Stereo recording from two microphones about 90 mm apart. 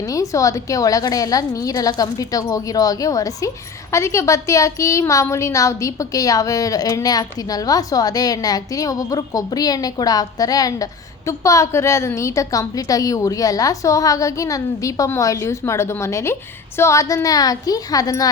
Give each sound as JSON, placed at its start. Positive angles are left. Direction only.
{"t": 0.0, "sound": "a woman's voice", "side_deg": 40}